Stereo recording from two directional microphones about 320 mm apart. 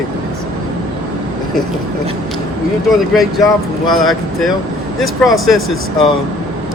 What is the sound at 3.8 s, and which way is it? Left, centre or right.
Speech, centre.